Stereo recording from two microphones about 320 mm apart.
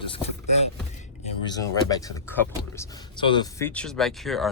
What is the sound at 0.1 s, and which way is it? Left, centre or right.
Vehicle, centre.